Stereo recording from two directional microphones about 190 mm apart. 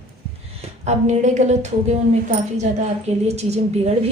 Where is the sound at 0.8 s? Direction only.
40° right (ahead or behind).